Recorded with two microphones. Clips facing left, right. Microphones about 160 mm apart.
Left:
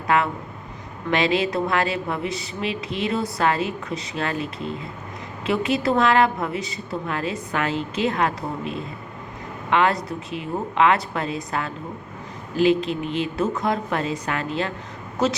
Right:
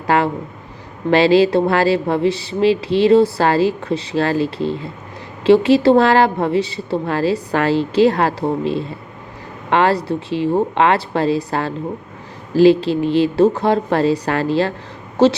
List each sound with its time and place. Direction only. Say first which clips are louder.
0.1 s speech: right 5 dB; 30° right (ahead or behind)